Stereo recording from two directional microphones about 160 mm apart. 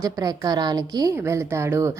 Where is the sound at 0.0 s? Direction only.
20° right (ahead or behind).